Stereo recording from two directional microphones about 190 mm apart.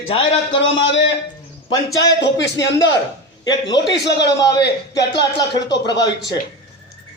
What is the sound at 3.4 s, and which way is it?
Speech, 20° left (ahead or behind).